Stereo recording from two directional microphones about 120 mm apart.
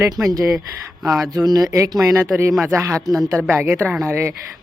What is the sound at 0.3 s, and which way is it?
Speech, 30° right (ahead or behind).